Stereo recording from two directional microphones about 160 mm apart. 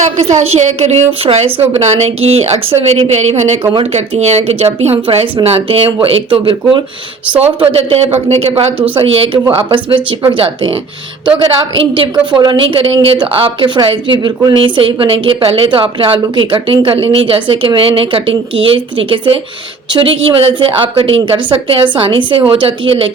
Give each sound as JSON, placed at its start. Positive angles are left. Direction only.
{"t": 0.2, "sound": "a woman's voice", "side_deg": -45}
{"t": 3.6, "sound": "speech", "side_deg": -30}
{"t": 3.9, "sound": "a woman's voice", "side_deg": -45}
{"t": 11.9, "sound": "a woman's voice", "side_deg": -30}